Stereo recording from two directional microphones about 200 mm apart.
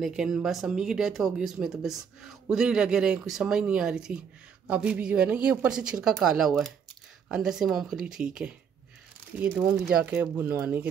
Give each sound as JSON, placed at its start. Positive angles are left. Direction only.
{"t": 0.0, "sound": "a woman's voice", "side_deg": 0}